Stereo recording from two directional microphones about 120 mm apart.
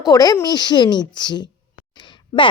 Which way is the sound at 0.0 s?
30° left (ahead or behind).